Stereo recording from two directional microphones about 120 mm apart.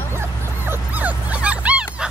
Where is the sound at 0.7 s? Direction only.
15° right (ahead or behind).